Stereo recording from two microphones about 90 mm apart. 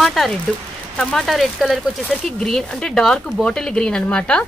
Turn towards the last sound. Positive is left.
turn(degrees=10)  # may be behind; listen again after turning